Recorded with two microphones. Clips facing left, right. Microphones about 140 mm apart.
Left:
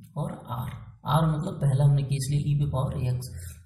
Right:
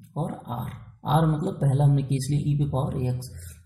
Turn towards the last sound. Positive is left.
turn(degrees=-45)  # may be behind; listen again after turning